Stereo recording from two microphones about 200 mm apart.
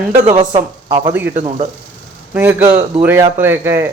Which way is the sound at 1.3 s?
35° right (ahead or behind).